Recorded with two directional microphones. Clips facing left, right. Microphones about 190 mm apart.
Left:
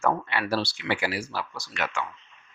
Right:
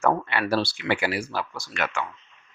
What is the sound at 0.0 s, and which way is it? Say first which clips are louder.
Speech: right 3 dB; 60° right (ahead or behind).